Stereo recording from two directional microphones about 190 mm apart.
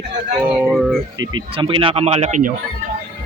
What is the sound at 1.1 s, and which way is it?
Speech, 20° right (ahead or behind).